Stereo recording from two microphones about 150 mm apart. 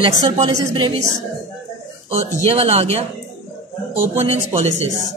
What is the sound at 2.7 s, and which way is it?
Speech, 45° right (ahead or behind).